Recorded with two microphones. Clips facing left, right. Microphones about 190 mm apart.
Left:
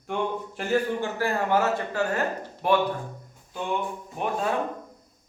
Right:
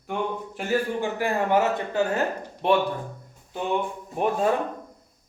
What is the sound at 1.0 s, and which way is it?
A man's voice, 15° right (ahead or behind).